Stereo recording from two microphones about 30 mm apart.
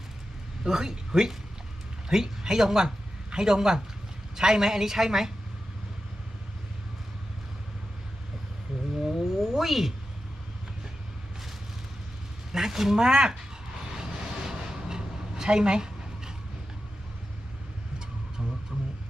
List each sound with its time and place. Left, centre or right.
0.6 s a man's voice: right
9.0 s cat: centre
12.5 s a woman's voice: centre
13.9 s vehicle: right
15.4 s dog: right